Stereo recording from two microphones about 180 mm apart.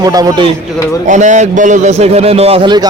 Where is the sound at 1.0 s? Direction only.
40° right (ahead or behind); by 2.8 s 25° right (ahead or behind).